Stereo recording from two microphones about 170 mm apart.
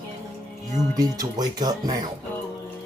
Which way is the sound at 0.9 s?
20° right (ahead or behind).